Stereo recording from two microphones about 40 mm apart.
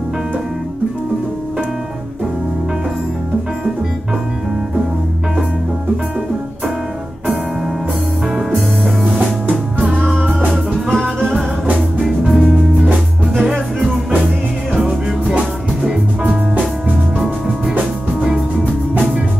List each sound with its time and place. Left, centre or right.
9.1 s music: right
9.9 s music: centre
10.9 s music: centre
12.3 s music: centre
13.4 s music: centre